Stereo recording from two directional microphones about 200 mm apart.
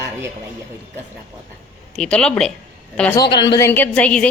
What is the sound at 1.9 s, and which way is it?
Speech, 5° left (ahead or behind).